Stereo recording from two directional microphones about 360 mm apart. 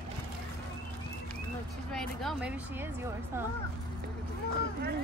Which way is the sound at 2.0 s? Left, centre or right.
Centre.